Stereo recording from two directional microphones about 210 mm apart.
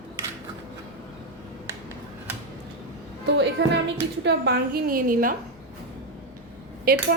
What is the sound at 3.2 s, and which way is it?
A woman's voice, 55° right (ahead or behind).